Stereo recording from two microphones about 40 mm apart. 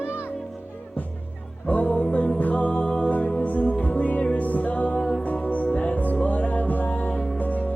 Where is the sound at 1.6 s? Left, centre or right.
Left.